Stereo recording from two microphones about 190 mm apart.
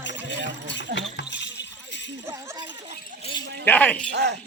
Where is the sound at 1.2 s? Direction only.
65° left (ahead or behind).